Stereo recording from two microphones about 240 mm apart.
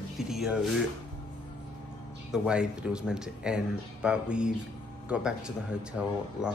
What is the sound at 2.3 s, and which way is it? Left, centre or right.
Speech, centre.